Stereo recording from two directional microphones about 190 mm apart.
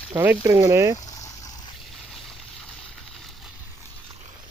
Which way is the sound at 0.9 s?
15° left (ahead or behind).